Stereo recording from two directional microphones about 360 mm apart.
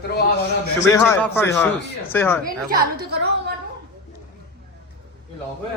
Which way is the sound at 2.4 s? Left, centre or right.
Right.